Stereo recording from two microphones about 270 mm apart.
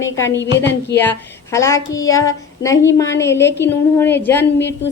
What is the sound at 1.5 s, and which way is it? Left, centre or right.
Speech, centre.